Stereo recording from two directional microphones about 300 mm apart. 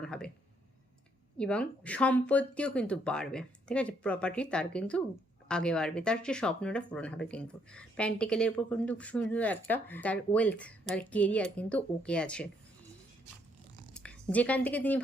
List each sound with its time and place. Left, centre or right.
0.0 s a sound: centre
1.4 s speech: centre
13.9 s speech: centre